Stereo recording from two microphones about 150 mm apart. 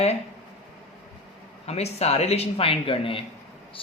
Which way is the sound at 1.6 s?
45° left (ahead or behind).